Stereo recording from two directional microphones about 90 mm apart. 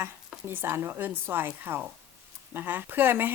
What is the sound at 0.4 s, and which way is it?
Speech, 25° right (ahead or behind).